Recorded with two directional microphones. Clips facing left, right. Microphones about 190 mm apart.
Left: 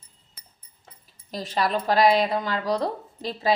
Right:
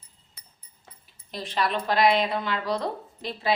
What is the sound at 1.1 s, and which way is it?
A woman's voice, 40° left (ahead or behind).